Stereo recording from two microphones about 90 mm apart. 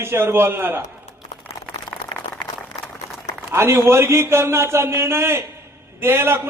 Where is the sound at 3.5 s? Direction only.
30° right (ahead or behind).